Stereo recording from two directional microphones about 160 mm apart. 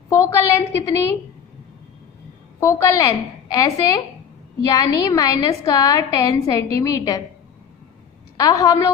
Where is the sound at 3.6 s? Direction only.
20° left (ahead or behind).